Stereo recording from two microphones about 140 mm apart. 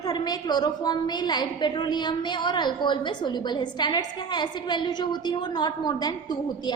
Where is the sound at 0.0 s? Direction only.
30° left (ahead or behind).